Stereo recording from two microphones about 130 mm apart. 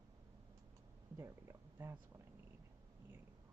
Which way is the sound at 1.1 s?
20° right (ahead or behind).